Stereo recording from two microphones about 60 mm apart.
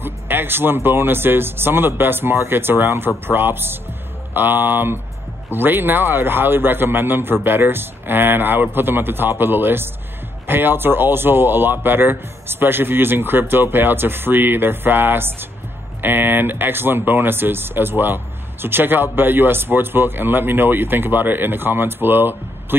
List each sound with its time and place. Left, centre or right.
0.0 s speech: right